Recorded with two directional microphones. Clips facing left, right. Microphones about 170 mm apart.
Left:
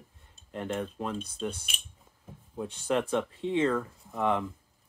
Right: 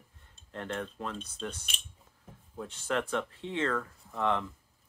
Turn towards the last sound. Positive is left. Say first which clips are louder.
# left 2 dB
turn(degrees=15)  # may be behind; listen again after turning